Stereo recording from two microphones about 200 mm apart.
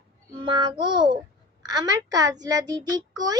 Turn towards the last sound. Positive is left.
turn(degrees=-20)  # may be behind; listen again after turning